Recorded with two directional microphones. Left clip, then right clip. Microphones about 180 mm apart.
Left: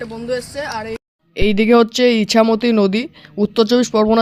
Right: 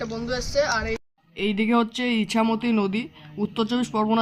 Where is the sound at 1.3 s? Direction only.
40° left (ahead or behind).